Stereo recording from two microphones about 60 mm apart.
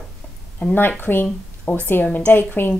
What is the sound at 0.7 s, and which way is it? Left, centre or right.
A woman's voice, left.